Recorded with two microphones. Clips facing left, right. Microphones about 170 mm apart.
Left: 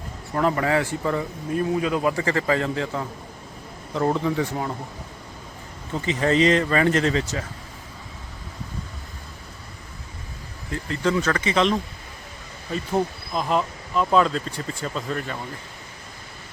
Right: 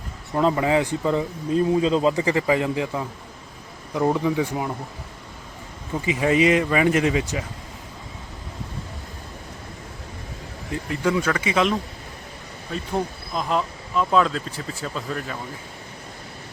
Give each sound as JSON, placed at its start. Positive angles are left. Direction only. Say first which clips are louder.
{"t": 0.3, "sound": "speech", "louder": "right 2 dB", "side_deg": -15}
{"t": 5.9, "sound": "speech", "louder": "right 1 dB", "side_deg": -10}
{"t": 10.7, "sound": "speech", "louder": "even", "side_deg": -15}
{"t": 12.7, "sound": "speech", "louder": "left 2 dB", "side_deg": 0}